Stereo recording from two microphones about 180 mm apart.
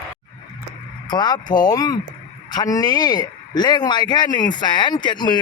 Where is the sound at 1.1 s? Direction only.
25° left (ahead or behind).